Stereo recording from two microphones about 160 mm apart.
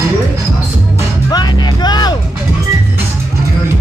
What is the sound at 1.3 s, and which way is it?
Music, 25° left (ahead or behind).